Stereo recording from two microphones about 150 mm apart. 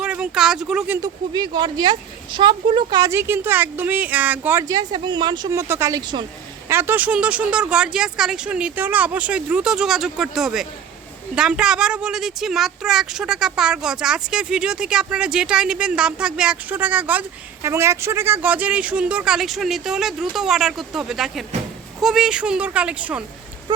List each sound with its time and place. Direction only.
0.0 s speech: 5° right (ahead or behind)
1.0 s speech: 30° right (ahead or behind); by 4.6 s 10° right (ahead or behind)
4.7 s speech: 30° right (ahead or behind)
5.5 s speech: 20° right (ahead or behind)
6.0 s speech: 30° right (ahead or behind)
6.7 s speech: 15° right (ahead or behind)